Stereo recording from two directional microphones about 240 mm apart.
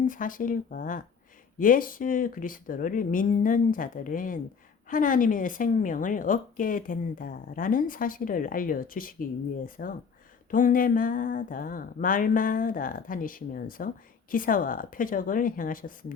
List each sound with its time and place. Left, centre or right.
0.1 s speech: left